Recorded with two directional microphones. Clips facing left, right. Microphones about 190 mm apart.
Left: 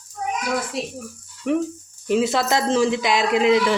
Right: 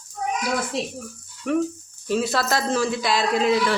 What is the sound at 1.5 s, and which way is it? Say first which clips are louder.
A man's voice: left 1 dB; 20° left (ahead or behind).